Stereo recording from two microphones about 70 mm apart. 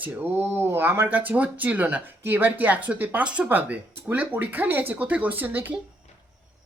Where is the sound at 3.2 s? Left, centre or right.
Centre.